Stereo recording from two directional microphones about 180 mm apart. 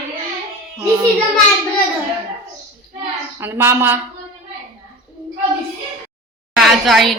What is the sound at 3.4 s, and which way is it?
Speech, 10° right (ahead or behind).